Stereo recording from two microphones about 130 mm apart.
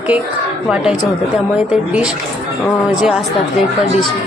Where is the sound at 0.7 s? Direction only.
5° right (ahead or behind).